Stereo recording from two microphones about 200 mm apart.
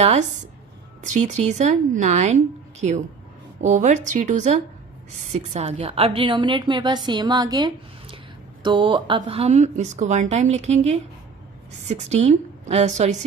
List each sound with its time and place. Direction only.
0.0 s a woman's voice: 35° right (ahead or behind)
3.6 s a woman's voice: 35° right (ahead or behind)